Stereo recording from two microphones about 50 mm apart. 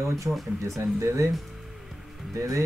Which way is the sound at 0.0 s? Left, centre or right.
Right.